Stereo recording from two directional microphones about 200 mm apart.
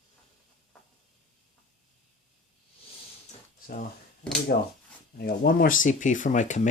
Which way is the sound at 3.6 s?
45° left (ahead or behind).